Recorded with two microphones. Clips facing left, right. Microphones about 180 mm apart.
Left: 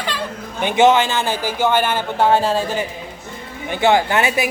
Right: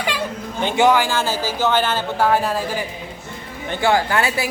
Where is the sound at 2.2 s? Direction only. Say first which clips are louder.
Left 3 dB; 25° left (ahead or behind).